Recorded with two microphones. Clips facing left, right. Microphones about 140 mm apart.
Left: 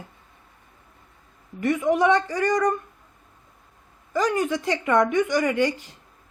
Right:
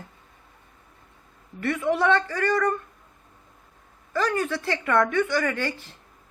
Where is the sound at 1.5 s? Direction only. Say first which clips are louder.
Left 3 dB; 15° left (ahead or behind).